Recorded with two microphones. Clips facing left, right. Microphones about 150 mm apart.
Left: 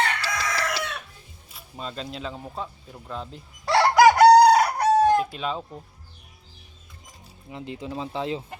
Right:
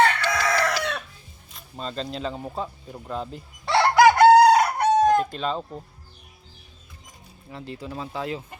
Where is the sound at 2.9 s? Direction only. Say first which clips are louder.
Right 5 dB; 5° right (ahead or behind).